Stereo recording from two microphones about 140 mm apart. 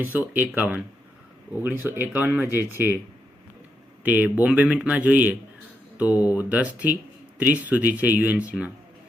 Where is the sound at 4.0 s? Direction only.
10° right (ahead or behind).